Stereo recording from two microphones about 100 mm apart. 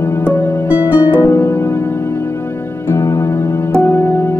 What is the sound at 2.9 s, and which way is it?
Music, 35° left (ahead or behind).